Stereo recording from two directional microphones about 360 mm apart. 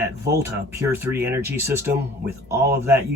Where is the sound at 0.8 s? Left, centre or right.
Centre.